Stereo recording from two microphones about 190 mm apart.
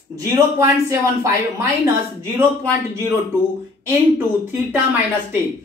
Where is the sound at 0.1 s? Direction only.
15° right (ahead or behind).